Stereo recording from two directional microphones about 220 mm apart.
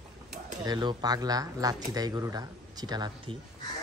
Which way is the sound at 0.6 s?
20° right (ahead or behind).